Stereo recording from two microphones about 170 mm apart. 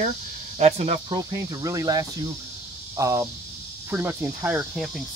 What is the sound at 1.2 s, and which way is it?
Speech, 20° right (ahead or behind).